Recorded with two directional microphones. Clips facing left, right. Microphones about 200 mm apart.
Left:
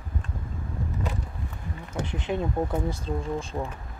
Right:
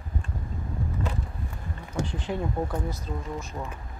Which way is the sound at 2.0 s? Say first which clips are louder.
Left 2 dB; 20° left (ahead or behind).